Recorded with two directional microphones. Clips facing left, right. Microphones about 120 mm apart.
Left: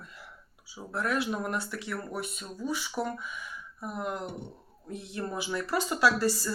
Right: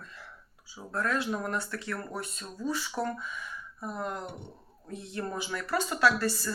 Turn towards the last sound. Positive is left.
turn(degrees=15)  # may be behind; listen again after turning